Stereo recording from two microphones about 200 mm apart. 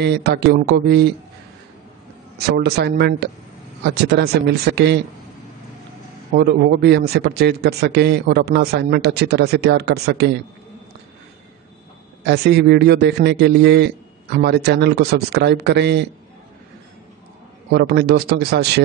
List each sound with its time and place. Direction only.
0.0 s a man's voice: 55° right (ahead or behind)
2.3 s a man's voice: 55° right (ahead or behind)
6.3 s a man's voice: 55° right (ahead or behind)
12.2 s a man's voice: 55° right (ahead or behind)
17.7 s speech: 55° right (ahead or behind)